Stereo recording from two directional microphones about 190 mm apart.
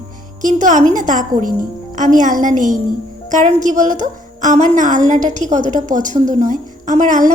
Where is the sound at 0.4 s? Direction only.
40° right (ahead or behind).